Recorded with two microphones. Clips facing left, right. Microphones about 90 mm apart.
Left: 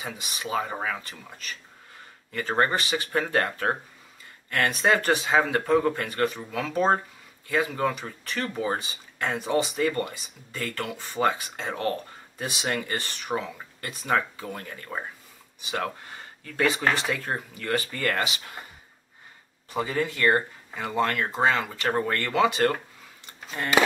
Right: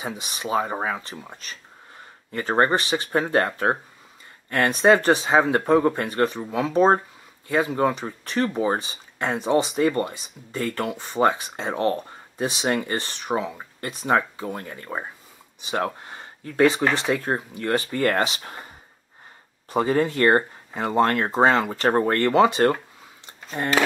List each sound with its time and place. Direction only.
0.0 s speech: 25° right (ahead or behind)
19.7 s speech: 35° right (ahead or behind)